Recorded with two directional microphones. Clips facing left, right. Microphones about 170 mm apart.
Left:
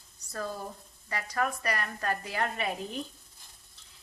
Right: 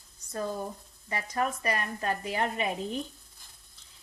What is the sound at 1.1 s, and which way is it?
A woman's voice, 20° right (ahead or behind).